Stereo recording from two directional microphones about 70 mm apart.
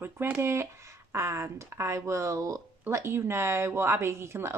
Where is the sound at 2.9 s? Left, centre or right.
Right.